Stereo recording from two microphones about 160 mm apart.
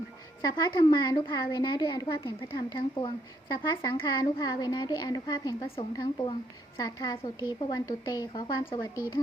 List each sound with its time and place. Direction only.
0.4 s a woman's voice: 25° left (ahead or behind)
5.6 s a woman's voice: 35° left (ahead or behind)
6.7 s a woman's voice: 25° left (ahead or behind)